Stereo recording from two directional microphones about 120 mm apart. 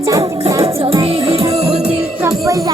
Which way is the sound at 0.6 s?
50° right (ahead or behind).